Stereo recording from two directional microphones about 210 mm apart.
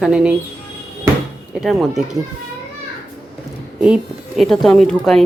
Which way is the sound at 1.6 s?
Centre (ahead or behind).